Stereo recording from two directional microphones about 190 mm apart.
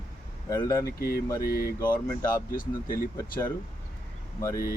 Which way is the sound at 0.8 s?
55° left (ahead or behind).